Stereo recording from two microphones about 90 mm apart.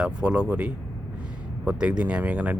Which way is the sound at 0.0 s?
10° right (ahead or behind).